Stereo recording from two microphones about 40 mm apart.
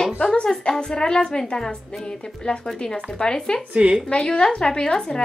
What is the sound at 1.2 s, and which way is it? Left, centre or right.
Speech, centre.